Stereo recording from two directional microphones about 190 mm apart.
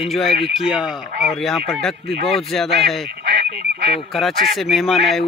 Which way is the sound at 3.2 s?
65° right (ahead or behind).